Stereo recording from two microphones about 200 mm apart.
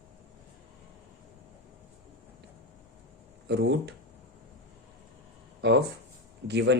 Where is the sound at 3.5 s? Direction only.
60° right (ahead or behind).